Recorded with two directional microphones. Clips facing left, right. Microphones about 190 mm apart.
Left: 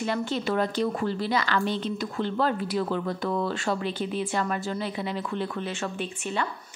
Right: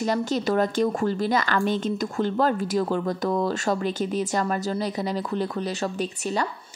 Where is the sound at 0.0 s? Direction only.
40° right (ahead or behind).